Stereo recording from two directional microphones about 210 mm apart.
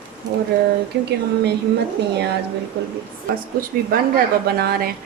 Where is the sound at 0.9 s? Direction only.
55° right (ahead or behind).